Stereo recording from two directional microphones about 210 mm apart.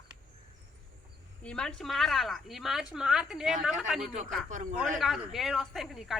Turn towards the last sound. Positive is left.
turn(degrees=0)  # may be behind; listen again after turning